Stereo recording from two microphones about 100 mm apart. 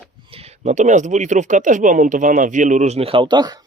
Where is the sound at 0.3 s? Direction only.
80° right.